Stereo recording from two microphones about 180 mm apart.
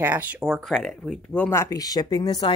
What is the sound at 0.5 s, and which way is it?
Speech, centre (ahead or behind).